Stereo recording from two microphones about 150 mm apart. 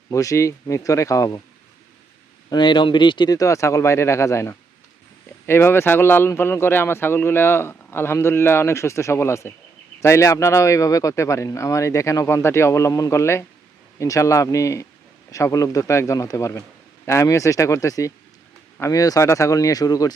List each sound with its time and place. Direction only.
0.1 s speech: 20° left (ahead or behind)
2.5 s speech: 30° left (ahead or behind)